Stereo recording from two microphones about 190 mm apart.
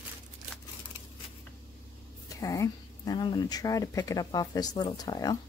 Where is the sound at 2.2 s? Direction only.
15° left (ahead or behind).